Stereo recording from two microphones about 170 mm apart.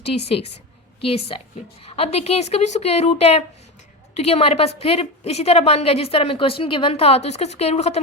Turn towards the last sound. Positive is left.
turn(degrees=40)  # may be behind; listen again after turning